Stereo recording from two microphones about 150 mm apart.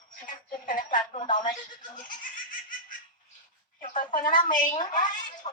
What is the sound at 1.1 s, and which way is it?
Speech, 55° left (ahead or behind).